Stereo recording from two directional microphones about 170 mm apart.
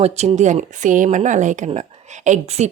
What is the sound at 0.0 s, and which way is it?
Speech, 40° right (ahead or behind).